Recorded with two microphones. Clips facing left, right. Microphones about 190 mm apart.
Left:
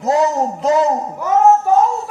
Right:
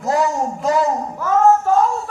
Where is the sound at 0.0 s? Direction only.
20° left (ahead or behind).